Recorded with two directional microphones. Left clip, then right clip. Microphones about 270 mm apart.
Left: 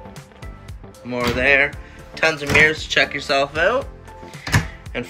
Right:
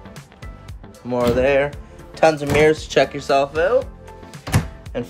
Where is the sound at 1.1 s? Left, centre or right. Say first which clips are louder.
Even; centre.